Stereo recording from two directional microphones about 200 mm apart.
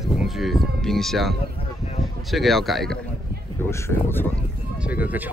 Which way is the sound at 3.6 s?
10° left (ahead or behind).